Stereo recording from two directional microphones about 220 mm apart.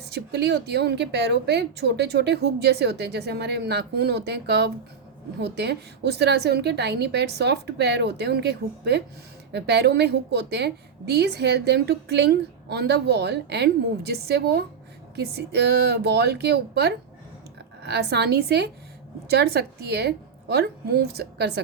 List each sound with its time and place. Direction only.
0.0 s a woman's voice: 50° right (ahead or behind)